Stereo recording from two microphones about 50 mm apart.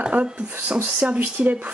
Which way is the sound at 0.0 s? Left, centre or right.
Right.